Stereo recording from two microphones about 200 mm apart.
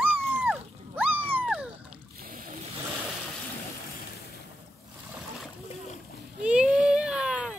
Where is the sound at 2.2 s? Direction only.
45° right (ahead or behind).